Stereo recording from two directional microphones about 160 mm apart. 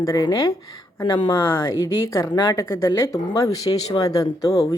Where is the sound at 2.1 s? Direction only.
25° left (ahead or behind).